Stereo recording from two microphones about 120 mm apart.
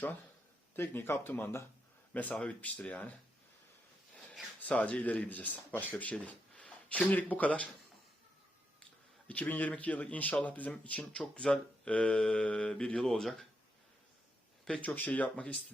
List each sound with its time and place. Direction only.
0.8 s speech: 20° left (ahead or behind)
4.6 s speech: 10° left (ahead or behind)
8.8 s speech: 10° left (ahead or behind)
14.6 s speech: 10° left (ahead or behind)